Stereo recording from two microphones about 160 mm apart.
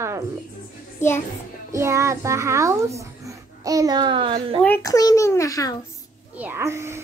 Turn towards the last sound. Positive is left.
turn(degrees=-15)  # may be behind; listen again after turning